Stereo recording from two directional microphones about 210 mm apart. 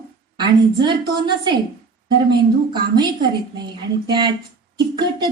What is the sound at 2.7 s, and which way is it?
A woman's voice, 20° right (ahead or behind).